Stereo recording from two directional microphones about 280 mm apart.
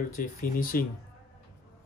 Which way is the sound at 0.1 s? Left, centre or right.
Left.